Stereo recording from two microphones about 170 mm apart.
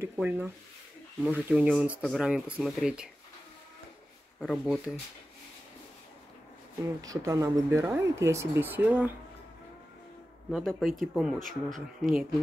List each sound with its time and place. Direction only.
0.0 s speech: 15° right (ahead or behind)
4.4 s speech: 5° right (ahead or behind)
7.0 s speech: 20° right (ahead or behind)
10.5 s speech: centre (ahead or behind)